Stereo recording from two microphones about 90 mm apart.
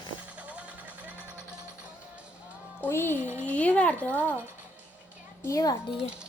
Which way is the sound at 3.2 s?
25° right (ahead or behind).